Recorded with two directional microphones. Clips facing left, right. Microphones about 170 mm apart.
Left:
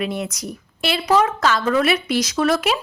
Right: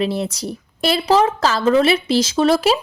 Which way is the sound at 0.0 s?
30° right (ahead or behind).